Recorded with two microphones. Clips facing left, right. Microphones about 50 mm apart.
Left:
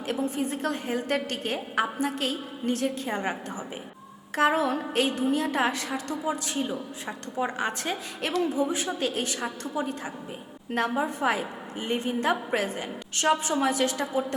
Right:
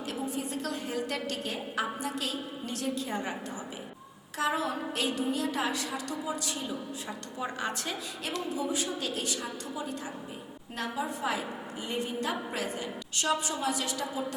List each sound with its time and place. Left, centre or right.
0.1 s a woman's voice: left
4.4 s a woman's voice: left
10.8 s a woman's voice: left